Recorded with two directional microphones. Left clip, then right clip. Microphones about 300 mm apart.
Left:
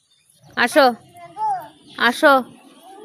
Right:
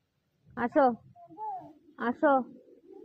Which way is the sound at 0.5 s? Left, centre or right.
Centre.